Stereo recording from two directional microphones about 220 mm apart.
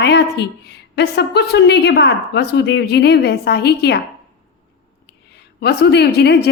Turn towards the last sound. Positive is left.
turn(degrees=50)  # may be behind; listen again after turning